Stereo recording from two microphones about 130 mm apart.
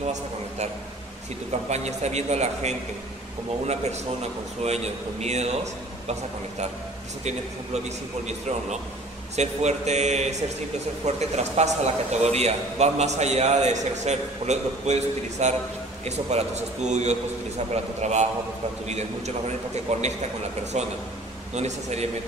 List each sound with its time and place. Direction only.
1.5 s a man's voice: 60° right (ahead or behind)
8.3 s a man's voice: 60° right (ahead or behind)